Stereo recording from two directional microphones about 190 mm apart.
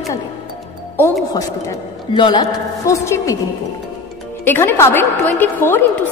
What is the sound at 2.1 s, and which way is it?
A woman's voice, 25° left (ahead or behind).